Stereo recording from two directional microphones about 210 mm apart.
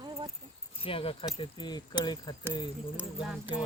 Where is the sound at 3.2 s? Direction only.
5° right (ahead or behind).